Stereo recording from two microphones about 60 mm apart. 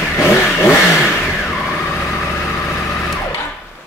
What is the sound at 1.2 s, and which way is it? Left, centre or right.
Vehicle, centre.